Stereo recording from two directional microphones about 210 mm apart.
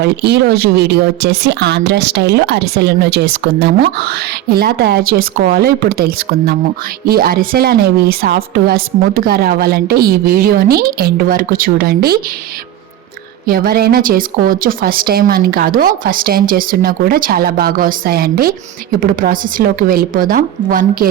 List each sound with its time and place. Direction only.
0.0 s speech: 50° right (ahead or behind)
13.5 s speech: 45° right (ahead or behind)